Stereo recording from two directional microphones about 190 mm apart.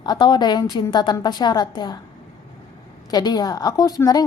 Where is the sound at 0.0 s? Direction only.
20° left (ahead or behind).